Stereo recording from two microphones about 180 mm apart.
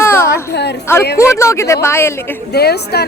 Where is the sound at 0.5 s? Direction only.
70° left (ahead or behind).